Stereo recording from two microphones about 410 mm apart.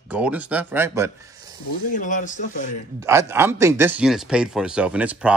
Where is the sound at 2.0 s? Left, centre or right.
Centre.